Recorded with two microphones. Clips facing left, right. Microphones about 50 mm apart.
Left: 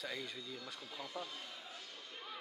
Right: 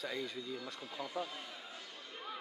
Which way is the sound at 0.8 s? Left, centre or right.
Centre.